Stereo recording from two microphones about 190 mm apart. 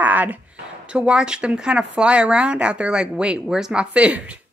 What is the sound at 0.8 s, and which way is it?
A woman's voice, 5° right (ahead or behind).